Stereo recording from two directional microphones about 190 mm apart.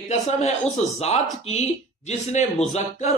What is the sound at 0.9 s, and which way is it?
Speech, 35° left (ahead or behind).